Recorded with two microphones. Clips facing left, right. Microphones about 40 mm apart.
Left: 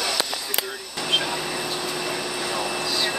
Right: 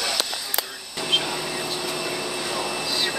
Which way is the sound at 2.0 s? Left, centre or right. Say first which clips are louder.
Left 1 dB; centre.